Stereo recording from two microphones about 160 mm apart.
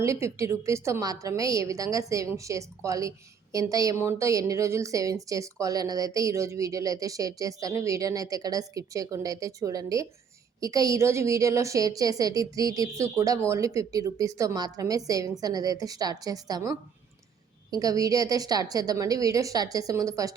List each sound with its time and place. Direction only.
0.0 s a woman's voice: 20° right (ahead or behind)